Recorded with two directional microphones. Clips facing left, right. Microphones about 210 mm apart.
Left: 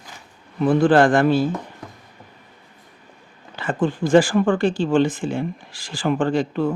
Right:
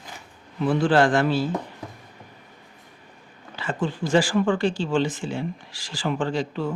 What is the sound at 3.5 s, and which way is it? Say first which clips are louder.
Speech: left 5 dB; 50° left (ahead or behind).